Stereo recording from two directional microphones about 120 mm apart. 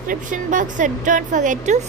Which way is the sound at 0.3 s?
90° right.